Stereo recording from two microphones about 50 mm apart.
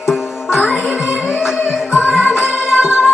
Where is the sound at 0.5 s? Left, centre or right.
Centre.